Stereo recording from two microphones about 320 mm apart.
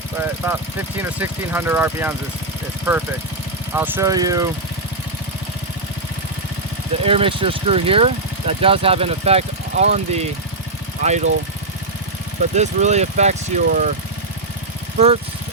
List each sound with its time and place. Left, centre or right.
1.2 s speech: centre
7.0 s speech: centre
12.5 s speech: right
14.9 s speech: centre